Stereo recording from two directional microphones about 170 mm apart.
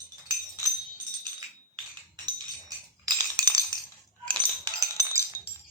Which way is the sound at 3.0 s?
20° right (ahead or behind).